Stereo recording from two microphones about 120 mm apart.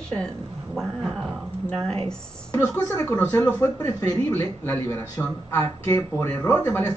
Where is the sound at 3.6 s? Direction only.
25° left (ahead or behind).